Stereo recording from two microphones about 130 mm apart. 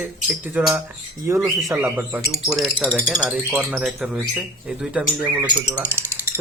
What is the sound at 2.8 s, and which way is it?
Speech, 10° left (ahead or behind).